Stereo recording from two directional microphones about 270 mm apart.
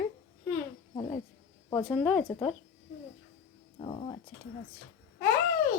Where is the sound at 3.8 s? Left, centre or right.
Centre.